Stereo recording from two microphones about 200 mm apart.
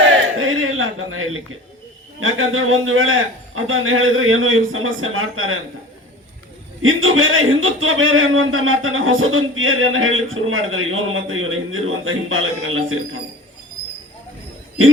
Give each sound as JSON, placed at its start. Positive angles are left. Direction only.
{"t": 0.3, "sound": "a sound", "side_deg": -90}
{"t": 2.2, "sound": "speech", "side_deg": -90}
{"t": 6.8, "sound": "speech", "side_deg": -90}